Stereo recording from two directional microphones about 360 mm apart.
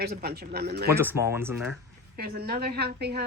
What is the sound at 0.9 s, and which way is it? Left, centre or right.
Speech, centre.